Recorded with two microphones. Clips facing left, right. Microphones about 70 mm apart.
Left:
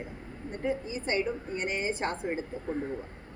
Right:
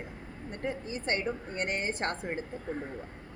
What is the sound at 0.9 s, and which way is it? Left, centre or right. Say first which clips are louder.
A woman's voice: left 2 dB; right.